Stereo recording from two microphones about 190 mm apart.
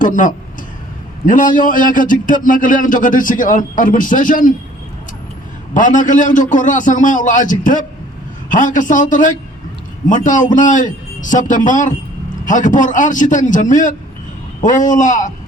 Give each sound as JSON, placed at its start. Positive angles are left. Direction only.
{"t": 0.0, "sound": "a man's voice", "side_deg": 45}
{"t": 5.7, "sound": "a man's voice", "side_deg": 40}